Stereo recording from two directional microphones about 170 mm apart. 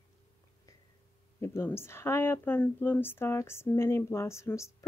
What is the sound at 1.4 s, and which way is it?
Speech, 15° left (ahead or behind).